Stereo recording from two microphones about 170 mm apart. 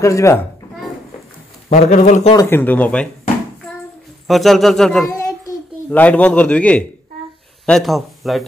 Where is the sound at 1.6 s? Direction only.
40° left (ahead or behind).